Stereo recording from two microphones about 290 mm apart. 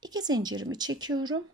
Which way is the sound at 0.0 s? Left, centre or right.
Centre.